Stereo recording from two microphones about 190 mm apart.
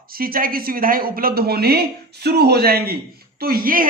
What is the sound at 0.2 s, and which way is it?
A man's voice, 50° right (ahead or behind).